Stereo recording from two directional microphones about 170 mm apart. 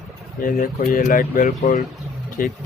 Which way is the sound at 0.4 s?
55° left (ahead or behind).